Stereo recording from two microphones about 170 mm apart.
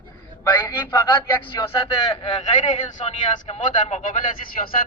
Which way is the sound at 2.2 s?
45° left (ahead or behind).